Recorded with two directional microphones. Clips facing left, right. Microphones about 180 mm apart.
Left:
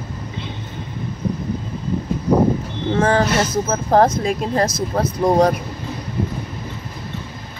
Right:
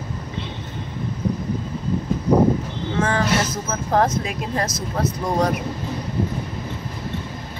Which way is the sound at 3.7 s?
35° left (ahead or behind).